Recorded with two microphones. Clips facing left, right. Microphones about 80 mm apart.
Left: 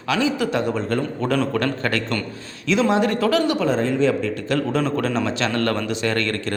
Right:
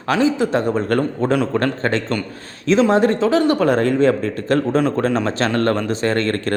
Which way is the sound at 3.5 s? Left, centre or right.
Right.